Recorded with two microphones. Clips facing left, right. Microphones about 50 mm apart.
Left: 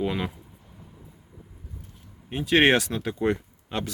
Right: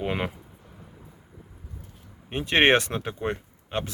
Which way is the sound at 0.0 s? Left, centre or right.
Right.